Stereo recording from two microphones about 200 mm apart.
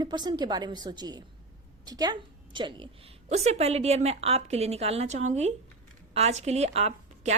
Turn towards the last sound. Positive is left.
turn(degrees=-30)  # may be behind; listen again after turning